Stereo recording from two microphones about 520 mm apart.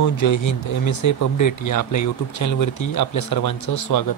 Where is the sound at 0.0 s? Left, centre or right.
Left.